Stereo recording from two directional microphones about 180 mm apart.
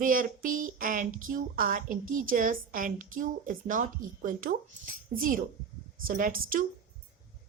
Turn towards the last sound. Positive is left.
turn(degrees=-50)  # may be behind; listen again after turning